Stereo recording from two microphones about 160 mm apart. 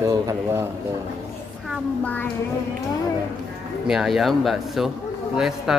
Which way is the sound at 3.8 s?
Centre (ahead or behind).